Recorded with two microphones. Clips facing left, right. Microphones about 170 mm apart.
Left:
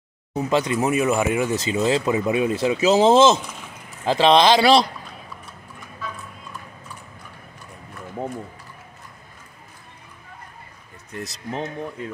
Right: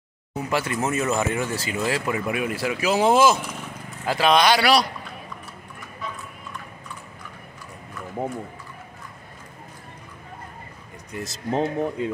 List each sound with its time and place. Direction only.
0.4 s speech: 20° left (ahead or behind)
11.1 s speech: centre (ahead or behind)
11.5 s speech: 35° right (ahead or behind)